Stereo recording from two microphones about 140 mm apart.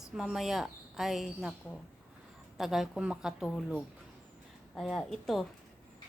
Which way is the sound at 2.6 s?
5° right (ahead or behind).